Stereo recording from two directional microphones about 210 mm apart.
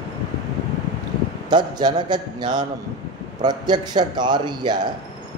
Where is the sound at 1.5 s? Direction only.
20° right (ahead or behind).